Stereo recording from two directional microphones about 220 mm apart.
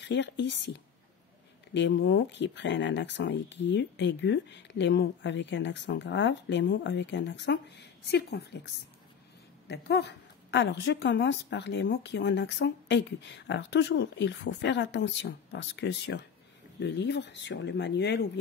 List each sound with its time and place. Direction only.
0.0 s a woman's voice: 55° left (ahead or behind)
9.7 s a woman's voice: 50° left (ahead or behind)